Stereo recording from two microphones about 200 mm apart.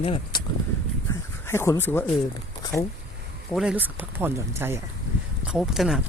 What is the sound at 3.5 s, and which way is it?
Speech, 5° right (ahead or behind).